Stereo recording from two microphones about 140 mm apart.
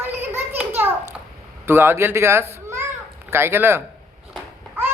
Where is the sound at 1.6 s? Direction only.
15° right (ahead or behind).